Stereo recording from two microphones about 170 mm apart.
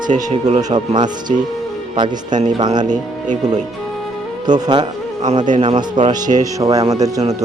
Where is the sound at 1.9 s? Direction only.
25° right (ahead or behind).